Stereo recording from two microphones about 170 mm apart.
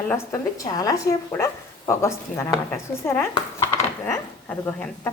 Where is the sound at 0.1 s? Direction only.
15° left (ahead or behind).